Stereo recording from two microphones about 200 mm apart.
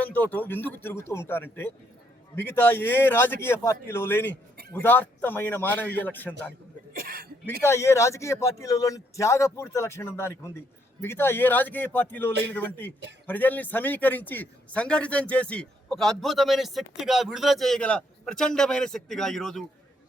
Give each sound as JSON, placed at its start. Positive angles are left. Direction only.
{"t": 0.0, "sound": "a man's voice", "side_deg": 5}
{"t": 6.9, "sound": "cough", "side_deg": -50}
{"t": 7.6, "sound": "a man's voice", "side_deg": 15}